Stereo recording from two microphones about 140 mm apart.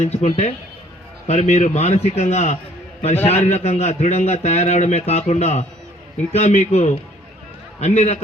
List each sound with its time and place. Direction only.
0.0 s a man's voice: 50° left (ahead or behind)